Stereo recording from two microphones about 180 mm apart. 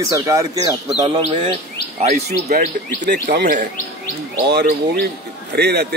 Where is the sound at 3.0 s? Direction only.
60° right (ahead or behind).